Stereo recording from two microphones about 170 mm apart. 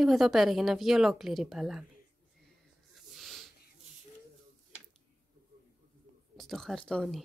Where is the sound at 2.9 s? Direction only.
Centre (ahead or behind).